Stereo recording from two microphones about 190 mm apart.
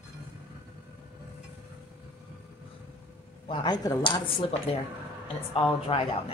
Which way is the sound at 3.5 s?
25° left (ahead or behind).